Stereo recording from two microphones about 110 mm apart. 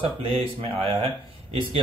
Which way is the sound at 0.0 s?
60° right (ahead or behind).